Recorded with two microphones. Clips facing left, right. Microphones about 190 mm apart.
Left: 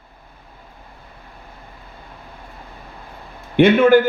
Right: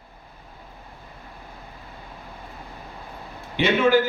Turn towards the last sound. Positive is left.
turn(degrees=55)  # may be behind; listen again after turning